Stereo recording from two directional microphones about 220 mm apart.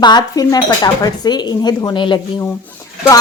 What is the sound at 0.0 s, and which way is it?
A woman's voice, 20° left (ahead or behind).